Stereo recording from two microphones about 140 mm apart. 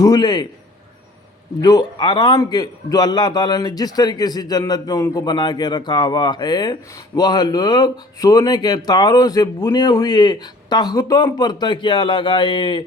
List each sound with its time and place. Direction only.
0.0 s a man's voice: 30° left (ahead or behind)
1.6 s a man's voice: 30° left (ahead or behind)